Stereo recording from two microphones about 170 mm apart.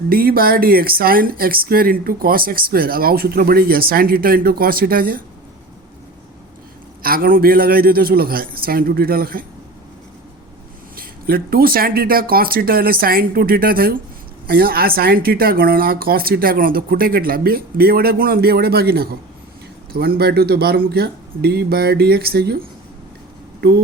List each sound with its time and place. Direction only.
0.1 s speech: 60° right (ahead or behind)
7.0 s speech: 60° right (ahead or behind)
10.9 s speech: 60° right (ahead or behind)